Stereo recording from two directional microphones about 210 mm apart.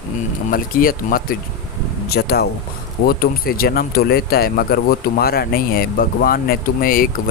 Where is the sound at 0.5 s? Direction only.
45° left (ahead or behind).